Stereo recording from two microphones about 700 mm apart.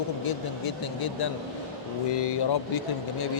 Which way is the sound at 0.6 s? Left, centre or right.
Left.